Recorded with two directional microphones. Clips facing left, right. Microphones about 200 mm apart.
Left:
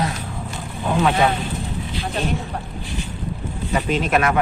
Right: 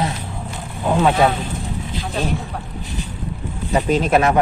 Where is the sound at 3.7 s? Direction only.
35° right (ahead or behind).